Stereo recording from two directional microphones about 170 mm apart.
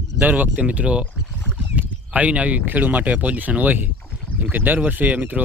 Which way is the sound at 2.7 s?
10° right (ahead or behind).